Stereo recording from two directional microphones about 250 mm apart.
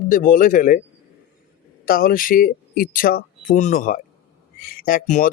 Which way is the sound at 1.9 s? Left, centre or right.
Left.